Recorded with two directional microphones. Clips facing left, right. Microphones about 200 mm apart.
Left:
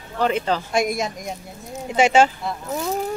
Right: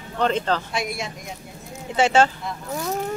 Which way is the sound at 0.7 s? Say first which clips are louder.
Left 6 dB; 45° left (ahead or behind).